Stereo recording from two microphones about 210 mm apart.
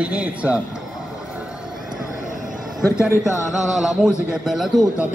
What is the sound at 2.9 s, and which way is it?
A man's voice, 5° right (ahead or behind).